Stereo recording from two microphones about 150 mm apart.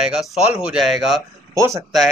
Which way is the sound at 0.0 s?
5° right (ahead or behind).